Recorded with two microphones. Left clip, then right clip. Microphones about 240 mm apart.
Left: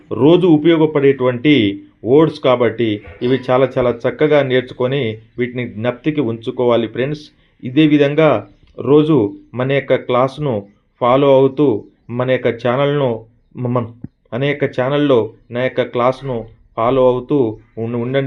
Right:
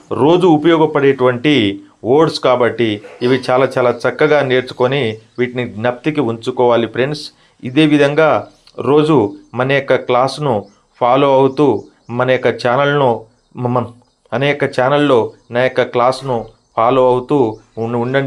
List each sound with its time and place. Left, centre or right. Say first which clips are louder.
0.1 s speech: right 1 dB; centre